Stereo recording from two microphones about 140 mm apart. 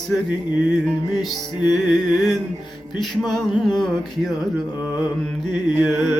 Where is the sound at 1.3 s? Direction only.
30° left (ahead or behind).